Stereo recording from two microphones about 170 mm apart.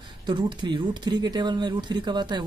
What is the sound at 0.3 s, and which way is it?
Speech, 30° right (ahead or behind).